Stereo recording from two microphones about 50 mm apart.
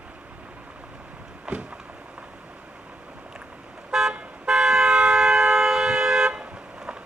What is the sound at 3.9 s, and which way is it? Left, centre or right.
Toot, centre.